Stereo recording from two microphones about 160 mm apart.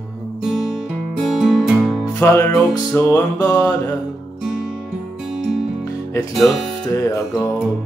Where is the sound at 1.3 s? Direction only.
Centre (ahead or behind).